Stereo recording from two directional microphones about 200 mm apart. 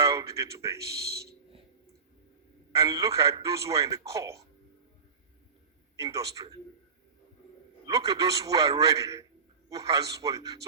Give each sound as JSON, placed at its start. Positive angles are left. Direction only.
{"t": 0.0, "sound": "speech", "side_deg": -15}
{"t": 2.7, "sound": "a man's voice", "side_deg": -15}
{"t": 6.0, "sound": "a man's voice", "side_deg": -15}
{"t": 7.9, "sound": "a man's voice", "side_deg": -15}